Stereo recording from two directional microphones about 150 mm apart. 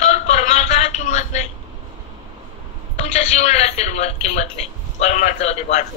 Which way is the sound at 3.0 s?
45° left (ahead or behind).